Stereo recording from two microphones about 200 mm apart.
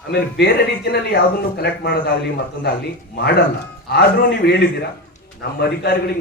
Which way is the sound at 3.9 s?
55° left (ahead or behind).